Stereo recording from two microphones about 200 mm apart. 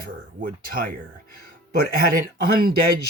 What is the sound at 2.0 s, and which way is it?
Speech, 45° right (ahead or behind).